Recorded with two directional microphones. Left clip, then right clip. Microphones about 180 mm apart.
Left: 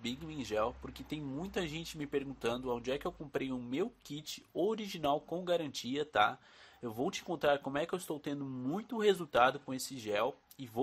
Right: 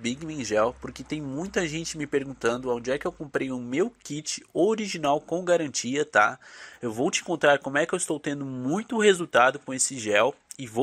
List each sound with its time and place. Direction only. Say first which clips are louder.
0.0 s speech: right 10 dB; 20° right (ahead or behind)